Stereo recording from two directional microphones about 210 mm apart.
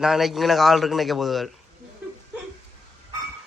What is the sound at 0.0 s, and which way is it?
A woman's voice, centre (ahead or behind).